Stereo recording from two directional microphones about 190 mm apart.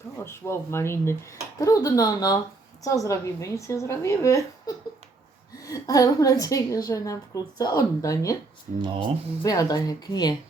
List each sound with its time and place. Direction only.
0.3 s a woman's voice: 15° left (ahead or behind)
9.4 s speech: 20° left (ahead or behind)